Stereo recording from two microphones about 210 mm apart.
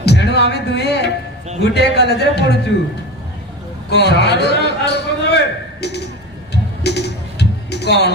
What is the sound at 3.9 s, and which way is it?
A man's voice, 55° left (ahead or behind).